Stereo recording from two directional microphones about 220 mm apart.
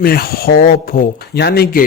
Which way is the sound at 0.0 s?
45° left (ahead or behind).